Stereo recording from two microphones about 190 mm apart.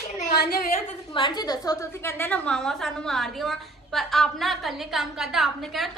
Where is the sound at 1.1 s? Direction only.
25° left (ahead or behind).